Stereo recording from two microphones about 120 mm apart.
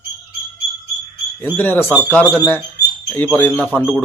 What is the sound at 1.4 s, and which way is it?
Speech, 15° left (ahead or behind).